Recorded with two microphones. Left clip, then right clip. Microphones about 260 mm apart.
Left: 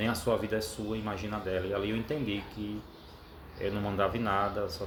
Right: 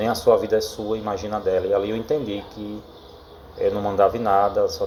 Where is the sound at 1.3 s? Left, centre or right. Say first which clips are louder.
Right 13 dB; left.